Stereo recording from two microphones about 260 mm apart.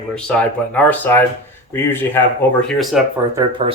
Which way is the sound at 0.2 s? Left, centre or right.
Centre.